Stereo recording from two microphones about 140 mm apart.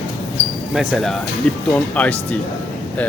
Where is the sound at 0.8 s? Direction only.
Centre (ahead or behind).